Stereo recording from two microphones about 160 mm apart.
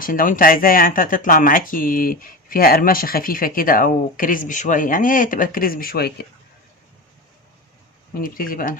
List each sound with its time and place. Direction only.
0.0 s speech: 60° left (ahead or behind)
8.2 s speech: 60° left (ahead or behind)